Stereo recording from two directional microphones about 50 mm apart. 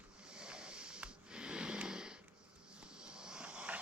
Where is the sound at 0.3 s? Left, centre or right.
Centre.